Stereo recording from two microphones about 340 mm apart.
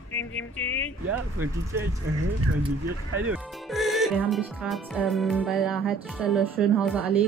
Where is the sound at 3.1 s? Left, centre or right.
Centre.